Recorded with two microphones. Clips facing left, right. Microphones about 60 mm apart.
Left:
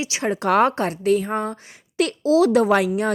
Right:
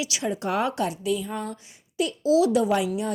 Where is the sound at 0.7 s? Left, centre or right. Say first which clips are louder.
Left 6 dB; left.